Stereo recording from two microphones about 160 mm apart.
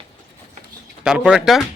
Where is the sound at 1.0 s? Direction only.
5° right (ahead or behind).